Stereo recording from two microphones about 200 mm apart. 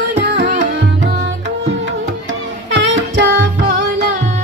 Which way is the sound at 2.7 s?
70° right (ahead or behind).